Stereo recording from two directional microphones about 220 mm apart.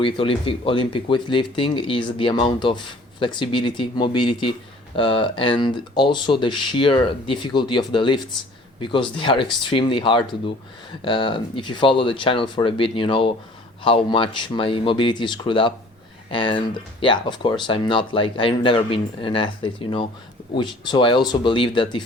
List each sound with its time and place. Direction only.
0.0 s speech: 25° left (ahead or behind)